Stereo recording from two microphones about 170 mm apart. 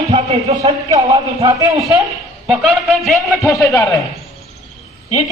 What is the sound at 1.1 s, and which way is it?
Speech, 20° right (ahead or behind).